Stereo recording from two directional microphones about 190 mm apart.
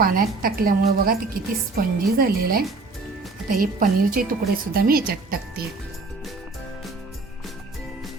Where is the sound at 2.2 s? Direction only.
50° right (ahead or behind).